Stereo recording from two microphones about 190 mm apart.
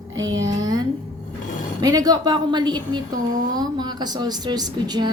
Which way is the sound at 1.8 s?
20° right (ahead or behind).